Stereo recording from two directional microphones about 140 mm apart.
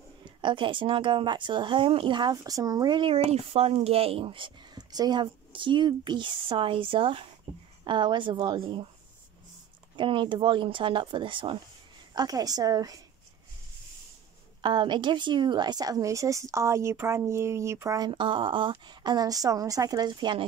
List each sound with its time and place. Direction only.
0.2 s speech: 35° right (ahead or behind)
9.9 s speech: 35° right (ahead or behind)
12.2 s speech: 25° right (ahead or behind)
14.6 s speech: 35° right (ahead or behind)